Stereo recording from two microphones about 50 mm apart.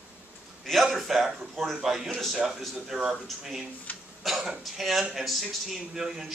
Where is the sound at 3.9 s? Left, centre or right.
Left.